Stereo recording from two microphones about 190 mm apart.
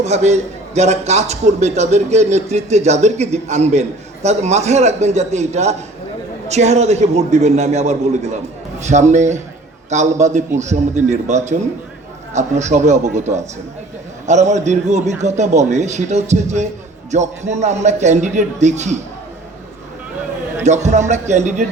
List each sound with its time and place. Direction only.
0.0 s a man's voice: 35° right (ahead or behind)
20.7 s a man's voice: 40° right (ahead or behind)